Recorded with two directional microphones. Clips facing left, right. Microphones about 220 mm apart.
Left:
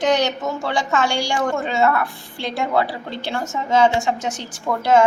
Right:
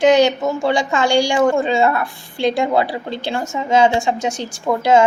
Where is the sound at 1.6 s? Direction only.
30° right (ahead or behind).